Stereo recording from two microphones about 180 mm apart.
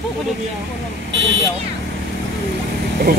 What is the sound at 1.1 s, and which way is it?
Vehicle, 90° right.